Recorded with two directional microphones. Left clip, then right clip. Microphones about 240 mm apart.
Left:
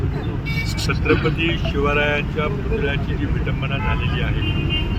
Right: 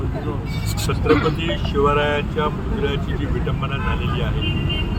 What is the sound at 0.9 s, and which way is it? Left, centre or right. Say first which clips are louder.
Speech: right 2 dB; centre.